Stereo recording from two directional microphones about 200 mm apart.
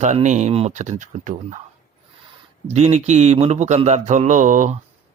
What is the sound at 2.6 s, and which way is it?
Speech, 35° right (ahead or behind).